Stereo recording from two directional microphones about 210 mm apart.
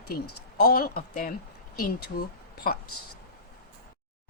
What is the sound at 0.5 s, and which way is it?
Speech, 45° left (ahead or behind).